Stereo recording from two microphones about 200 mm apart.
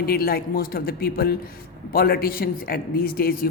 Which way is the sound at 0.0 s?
50° left (ahead or behind).